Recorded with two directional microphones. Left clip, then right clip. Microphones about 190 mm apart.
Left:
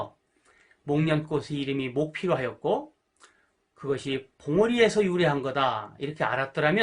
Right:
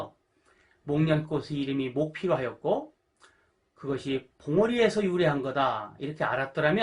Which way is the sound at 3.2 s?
40° left (ahead or behind).